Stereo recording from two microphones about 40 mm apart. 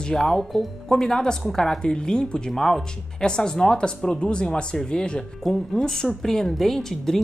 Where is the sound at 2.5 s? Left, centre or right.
Centre.